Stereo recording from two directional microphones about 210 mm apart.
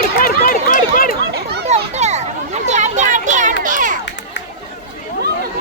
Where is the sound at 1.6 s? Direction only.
30° right (ahead or behind).